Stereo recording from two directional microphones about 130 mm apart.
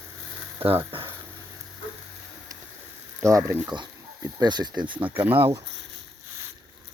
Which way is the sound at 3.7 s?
35° right (ahead or behind).